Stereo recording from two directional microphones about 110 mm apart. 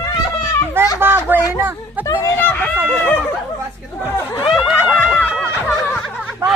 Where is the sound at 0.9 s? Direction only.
20° right (ahead or behind).